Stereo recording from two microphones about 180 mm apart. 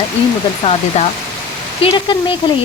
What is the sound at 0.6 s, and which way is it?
Speech, 35° left (ahead or behind).